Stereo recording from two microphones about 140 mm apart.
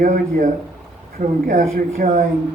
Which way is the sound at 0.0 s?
65° right (ahead or behind).